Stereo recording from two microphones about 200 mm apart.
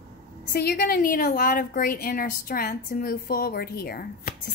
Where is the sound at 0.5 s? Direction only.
50° left (ahead or behind).